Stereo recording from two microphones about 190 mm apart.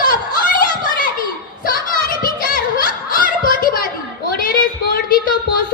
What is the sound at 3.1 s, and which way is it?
Children playing, 50° left (ahead or behind).